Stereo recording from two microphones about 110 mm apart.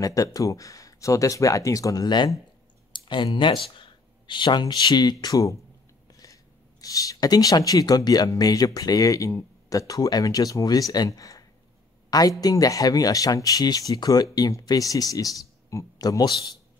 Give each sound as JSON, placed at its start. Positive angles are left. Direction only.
{"t": 0.0, "sound": "speech", "side_deg": 30}
{"t": 2.9, "sound": "a sound", "side_deg": 45}
{"t": 3.3, "sound": "speech", "side_deg": 50}